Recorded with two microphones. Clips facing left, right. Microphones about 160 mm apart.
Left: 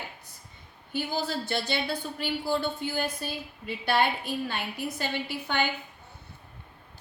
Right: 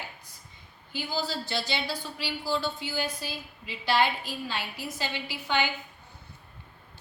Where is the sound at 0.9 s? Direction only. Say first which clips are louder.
Left 2 dB; 55° left (ahead or behind).